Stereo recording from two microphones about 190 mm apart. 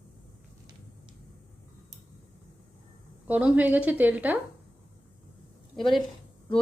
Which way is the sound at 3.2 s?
10° right (ahead or behind).